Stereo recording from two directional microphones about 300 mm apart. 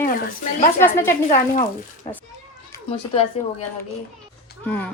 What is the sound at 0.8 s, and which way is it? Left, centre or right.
Speech, centre.